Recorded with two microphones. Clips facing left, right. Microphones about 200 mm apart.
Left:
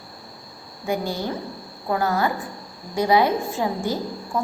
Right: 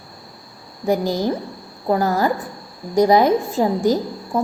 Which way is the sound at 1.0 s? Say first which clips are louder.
Right 6 dB; 90° right.